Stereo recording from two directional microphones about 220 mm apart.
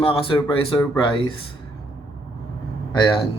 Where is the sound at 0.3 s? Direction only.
10° left (ahead or behind).